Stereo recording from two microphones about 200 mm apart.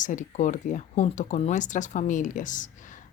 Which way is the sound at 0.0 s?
40° left (ahead or behind).